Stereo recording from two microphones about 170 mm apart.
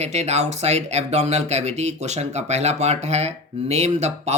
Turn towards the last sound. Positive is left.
turn(degrees=-40)  # may be behind; listen again after turning